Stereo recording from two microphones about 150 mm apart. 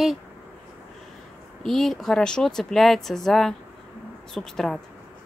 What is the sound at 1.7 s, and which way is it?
A woman's voice, centre (ahead or behind).